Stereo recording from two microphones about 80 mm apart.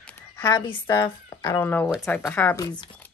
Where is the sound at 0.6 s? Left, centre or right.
Left.